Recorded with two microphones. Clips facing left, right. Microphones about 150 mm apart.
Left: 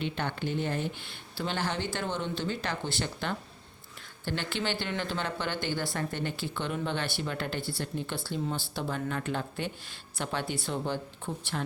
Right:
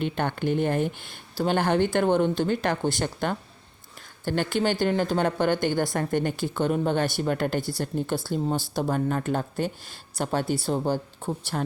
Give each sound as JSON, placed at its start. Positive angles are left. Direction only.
{"t": 0.0, "sound": "speech", "side_deg": -50}